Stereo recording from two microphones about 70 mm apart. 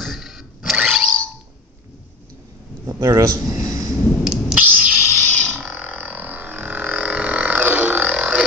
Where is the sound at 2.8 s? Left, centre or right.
Right.